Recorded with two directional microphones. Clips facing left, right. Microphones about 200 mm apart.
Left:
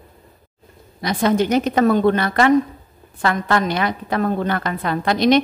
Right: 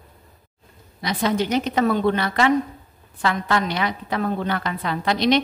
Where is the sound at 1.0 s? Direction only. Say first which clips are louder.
Left 4 dB; 50° left (ahead or behind).